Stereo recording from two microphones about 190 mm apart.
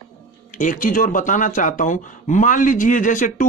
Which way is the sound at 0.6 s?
45° left (ahead or behind).